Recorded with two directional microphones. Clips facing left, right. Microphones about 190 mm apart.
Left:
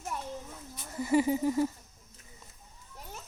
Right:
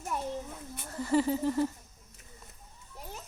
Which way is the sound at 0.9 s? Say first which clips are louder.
Left 1 dB; 10° left (ahead or behind).